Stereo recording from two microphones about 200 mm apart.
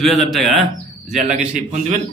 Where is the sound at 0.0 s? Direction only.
Centre (ahead or behind).